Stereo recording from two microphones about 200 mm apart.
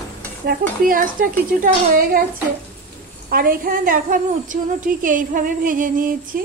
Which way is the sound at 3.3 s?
45° right (ahead or behind).